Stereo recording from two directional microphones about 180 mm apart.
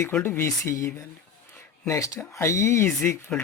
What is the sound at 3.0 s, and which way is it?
Speech, 5° left (ahead or behind).